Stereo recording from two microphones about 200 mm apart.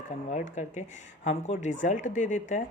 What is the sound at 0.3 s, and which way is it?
Speech, 35° left (ahead or behind).